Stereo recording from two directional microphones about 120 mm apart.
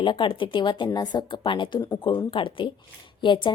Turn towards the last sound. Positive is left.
turn(degrees=40)  # may be behind; listen again after turning